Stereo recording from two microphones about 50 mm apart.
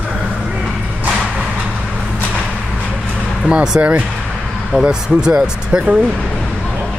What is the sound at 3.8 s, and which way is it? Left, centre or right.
Speech, right.